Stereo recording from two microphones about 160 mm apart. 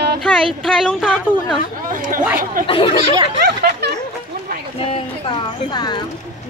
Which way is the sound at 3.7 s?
90° right.